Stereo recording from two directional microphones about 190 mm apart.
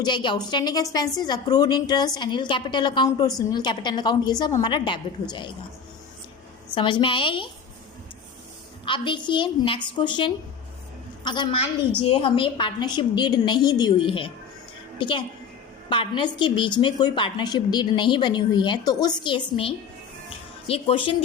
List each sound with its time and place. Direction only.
0.0 s a woman's voice: 25° left (ahead or behind)
6.7 s a woman's voice: 25° left (ahead or behind)
8.8 s a woman's voice: 25° left (ahead or behind)